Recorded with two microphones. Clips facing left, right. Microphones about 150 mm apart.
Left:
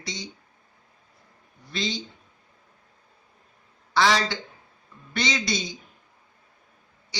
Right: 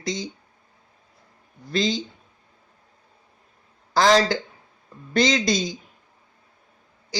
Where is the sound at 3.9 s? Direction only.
40° right (ahead or behind).